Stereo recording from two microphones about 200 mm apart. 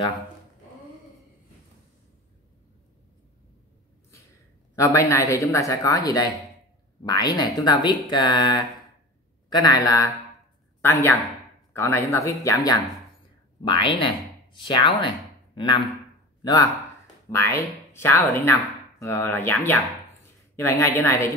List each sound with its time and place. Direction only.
4.7 s speech: 15° left (ahead or behind)
17.3 s speech: 10° left (ahead or behind)